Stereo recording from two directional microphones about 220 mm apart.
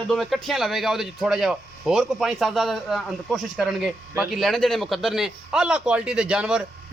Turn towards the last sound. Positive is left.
turn(degrees=-5)  # may be behind; listen again after turning